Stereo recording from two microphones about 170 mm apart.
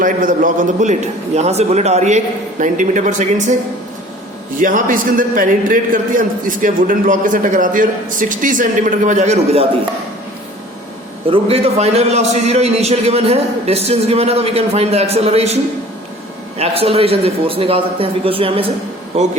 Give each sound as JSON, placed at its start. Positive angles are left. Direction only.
{"t": 0.0, "sound": "a man's voice", "side_deg": -55}
{"t": 4.5, "sound": "a man's voice", "side_deg": -50}
{"t": 11.3, "sound": "a man's voice", "side_deg": -35}
{"t": 16.6, "sound": "a man's voice", "side_deg": -35}